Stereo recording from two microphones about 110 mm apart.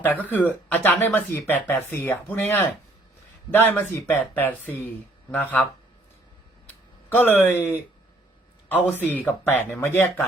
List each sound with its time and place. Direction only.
0.0 s speech: 15° left (ahead or behind)
7.2 s speech: 20° left (ahead or behind)
8.7 s speech: 15° left (ahead or behind)